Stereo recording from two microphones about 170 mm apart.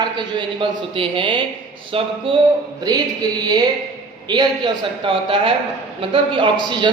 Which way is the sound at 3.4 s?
25° right (ahead or behind).